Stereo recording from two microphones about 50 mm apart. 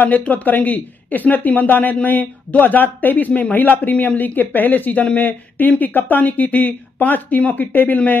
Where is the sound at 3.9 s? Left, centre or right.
Left.